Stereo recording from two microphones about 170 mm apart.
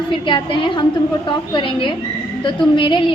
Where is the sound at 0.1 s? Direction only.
30° left (ahead or behind).